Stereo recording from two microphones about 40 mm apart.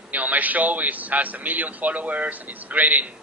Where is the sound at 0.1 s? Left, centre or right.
Right.